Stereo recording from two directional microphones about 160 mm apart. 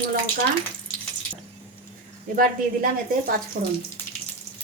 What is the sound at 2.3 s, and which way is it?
A woman's voice, 65° right (ahead or behind).